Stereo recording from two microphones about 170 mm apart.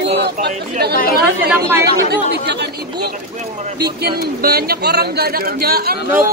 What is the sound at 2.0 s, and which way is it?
A man's voice, 75° right (ahead or behind).